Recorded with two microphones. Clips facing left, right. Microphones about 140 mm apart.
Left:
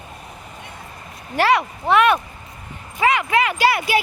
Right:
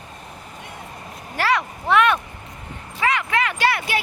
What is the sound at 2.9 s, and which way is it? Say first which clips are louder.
Speech: left 4 dB; 15° left (ahead or behind).